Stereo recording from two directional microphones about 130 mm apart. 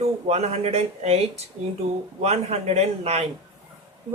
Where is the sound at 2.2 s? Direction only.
55° right (ahead or behind).